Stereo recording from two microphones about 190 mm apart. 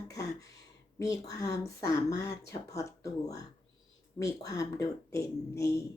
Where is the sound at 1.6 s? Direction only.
15° left (ahead or behind).